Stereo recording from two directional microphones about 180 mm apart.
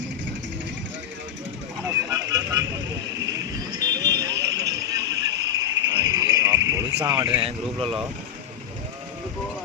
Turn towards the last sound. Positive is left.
turn(degrees=-30)  # may be behind; listen again after turning